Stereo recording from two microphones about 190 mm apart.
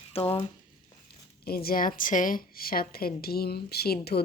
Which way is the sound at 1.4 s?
55° left (ahead or behind).